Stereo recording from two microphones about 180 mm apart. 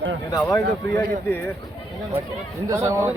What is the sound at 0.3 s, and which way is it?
Speech, 20° left (ahead or behind).